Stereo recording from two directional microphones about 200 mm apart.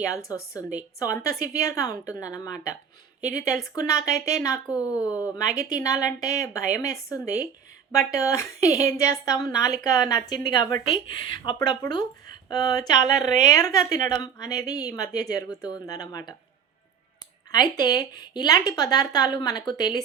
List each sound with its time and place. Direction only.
0.0 s speech: 15° left (ahead or behind)
3.8 s speech: 15° left (ahead or behind)
5.5 s a woman's voice: 45° right (ahead or behind)
6.1 s speech: 15° left (ahead or behind)
17.5 s speech: 20° left (ahead or behind)